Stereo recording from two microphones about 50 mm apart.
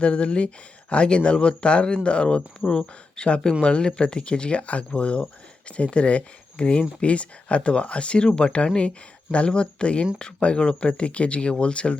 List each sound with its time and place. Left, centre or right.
0.0 s speech: left